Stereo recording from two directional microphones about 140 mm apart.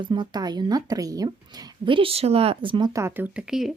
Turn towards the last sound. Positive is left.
turn(degrees=-5)  # may be behind; listen again after turning